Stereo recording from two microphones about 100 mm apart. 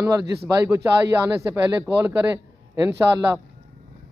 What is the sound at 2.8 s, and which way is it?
Speech, 25° right (ahead or behind).